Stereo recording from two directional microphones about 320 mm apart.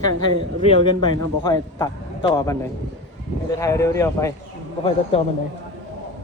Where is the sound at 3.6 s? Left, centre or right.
Centre.